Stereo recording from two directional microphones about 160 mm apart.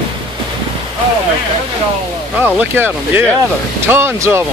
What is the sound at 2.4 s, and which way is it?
Speech, 10° right (ahead or behind).